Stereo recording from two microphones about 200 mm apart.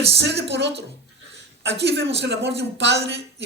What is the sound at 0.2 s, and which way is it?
Speech, 60° right (ahead or behind).